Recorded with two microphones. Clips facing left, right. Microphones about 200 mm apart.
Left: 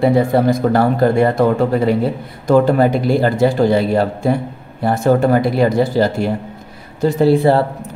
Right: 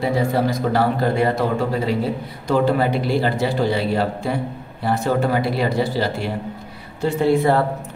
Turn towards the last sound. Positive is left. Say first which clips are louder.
# left 5 dB
turn(degrees=30)  # may be behind; listen again after turning